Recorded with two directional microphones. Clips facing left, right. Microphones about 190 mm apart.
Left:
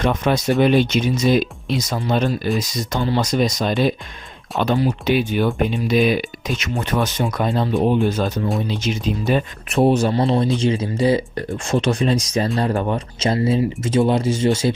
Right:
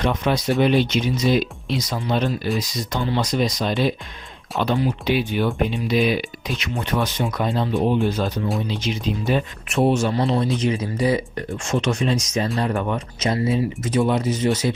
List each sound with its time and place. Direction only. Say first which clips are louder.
0.0 s speech: left 2 dB; 45° left (ahead or behind); by 14.7 s 30° left (ahead or behind)